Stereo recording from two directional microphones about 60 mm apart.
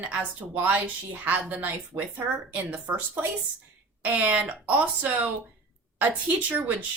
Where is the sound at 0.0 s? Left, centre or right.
Right.